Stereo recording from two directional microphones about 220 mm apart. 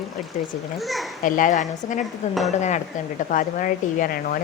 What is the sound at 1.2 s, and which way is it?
A woman's voice, 35° left (ahead or behind).